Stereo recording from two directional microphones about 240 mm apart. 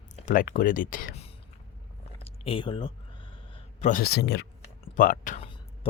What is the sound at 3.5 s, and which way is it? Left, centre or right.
Speech, left.